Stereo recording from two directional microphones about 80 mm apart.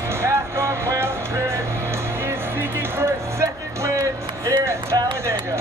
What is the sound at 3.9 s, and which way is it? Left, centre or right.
Music, right.